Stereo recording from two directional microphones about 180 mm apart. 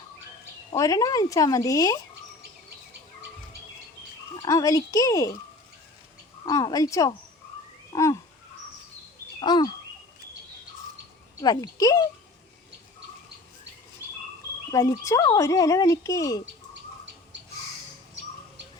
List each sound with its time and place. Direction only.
0.7 s speech: 20° left (ahead or behind)
4.4 s speech: 20° left (ahead or behind)
6.4 s speech: 20° left (ahead or behind)
9.4 s speech: 25° left (ahead or behind)
11.3 s speech: 20° left (ahead or behind)
14.7 s speech: 15° left (ahead or behind)